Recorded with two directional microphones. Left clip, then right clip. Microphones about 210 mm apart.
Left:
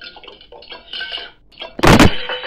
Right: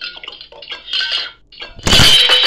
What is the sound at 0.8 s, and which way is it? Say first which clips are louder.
Dishes: right 9 dB; 5° right (ahead or behind).